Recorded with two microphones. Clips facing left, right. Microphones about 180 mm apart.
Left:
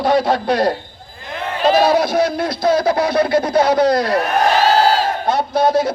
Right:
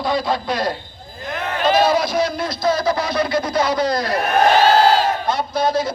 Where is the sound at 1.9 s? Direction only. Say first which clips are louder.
Left 3 dB; 60° left (ahead or behind).